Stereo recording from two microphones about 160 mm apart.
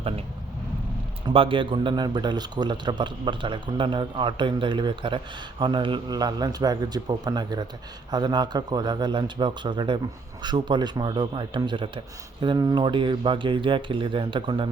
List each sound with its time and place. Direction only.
1.3 s a man's voice: 35° right (ahead or behind)